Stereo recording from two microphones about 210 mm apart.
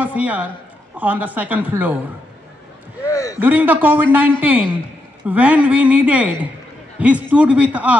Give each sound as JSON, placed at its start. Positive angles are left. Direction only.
{"t": 0.0, "sound": "speech", "side_deg": -5}
{"t": 3.1, "sound": "speech", "side_deg": 15}
{"t": 3.3, "sound": "speech", "side_deg": -10}